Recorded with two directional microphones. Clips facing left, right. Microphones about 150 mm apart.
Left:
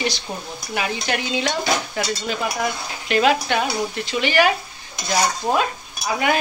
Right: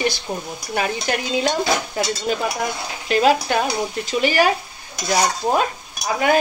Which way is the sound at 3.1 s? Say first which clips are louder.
Right 1 dB; 35° right (ahead or behind).